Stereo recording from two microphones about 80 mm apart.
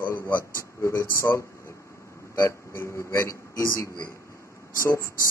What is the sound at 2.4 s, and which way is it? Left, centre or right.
A man's voice, left.